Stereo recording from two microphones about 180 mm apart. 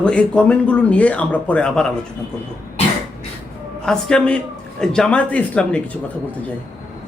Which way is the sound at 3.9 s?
5° left (ahead or behind).